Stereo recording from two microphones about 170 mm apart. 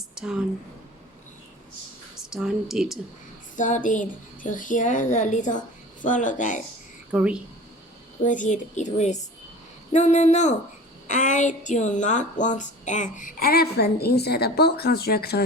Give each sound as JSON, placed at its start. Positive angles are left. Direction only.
{"t": 0.2, "sound": "speech", "side_deg": -5}
{"t": 2.3, "sound": "speech", "side_deg": -5}
{"t": 3.5, "sound": "a woman's voice", "side_deg": 50}
{"t": 7.1, "sound": "a woman's voice", "side_deg": -5}
{"t": 8.2, "sound": "a woman's voice", "side_deg": 45}